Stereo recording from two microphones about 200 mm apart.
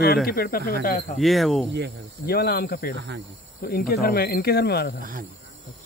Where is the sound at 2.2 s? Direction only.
50° left (ahead or behind).